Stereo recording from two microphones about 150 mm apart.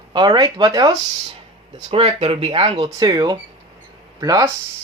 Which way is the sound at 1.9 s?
40° right (ahead or behind).